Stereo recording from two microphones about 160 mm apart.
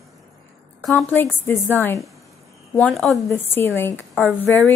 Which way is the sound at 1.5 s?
10° left (ahead or behind).